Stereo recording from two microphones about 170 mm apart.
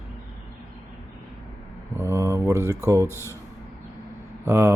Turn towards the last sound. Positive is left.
turn(degrees=-15)  # may be behind; listen again after turning